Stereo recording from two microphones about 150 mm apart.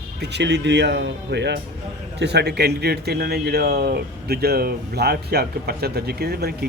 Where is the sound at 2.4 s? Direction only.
90° right.